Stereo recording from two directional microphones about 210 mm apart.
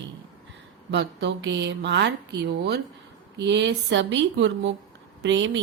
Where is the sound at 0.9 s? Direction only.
55° right (ahead or behind).